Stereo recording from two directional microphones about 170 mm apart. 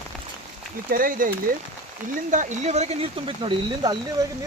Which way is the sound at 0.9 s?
55° right (ahead or behind).